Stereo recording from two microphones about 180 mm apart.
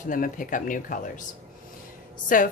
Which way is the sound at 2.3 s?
50° left (ahead or behind).